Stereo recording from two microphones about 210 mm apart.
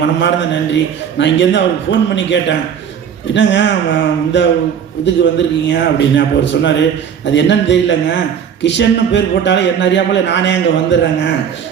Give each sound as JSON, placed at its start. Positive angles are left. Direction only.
{"t": 0.0, "sound": "a man's voice", "side_deg": 55}